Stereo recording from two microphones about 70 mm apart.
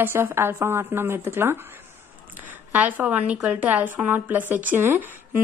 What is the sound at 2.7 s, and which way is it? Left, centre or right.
A woman's voice, right.